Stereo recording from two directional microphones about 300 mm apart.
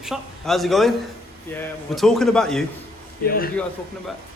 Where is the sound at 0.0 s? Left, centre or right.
Centre.